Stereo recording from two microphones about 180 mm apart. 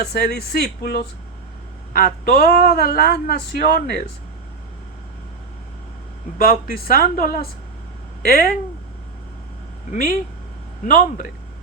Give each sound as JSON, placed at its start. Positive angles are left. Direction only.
{"t": 0.0, "sound": "a man's voice", "side_deg": 60}
{"t": 6.4, "sound": "a man's voice", "side_deg": 55}
{"t": 10.8, "sound": "speech", "side_deg": 50}